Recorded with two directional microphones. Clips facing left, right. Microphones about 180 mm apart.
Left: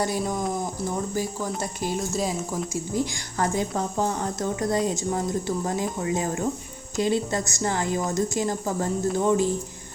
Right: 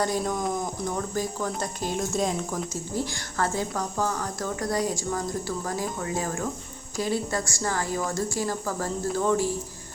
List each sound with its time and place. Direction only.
0.0 s speech: 10° left (ahead or behind)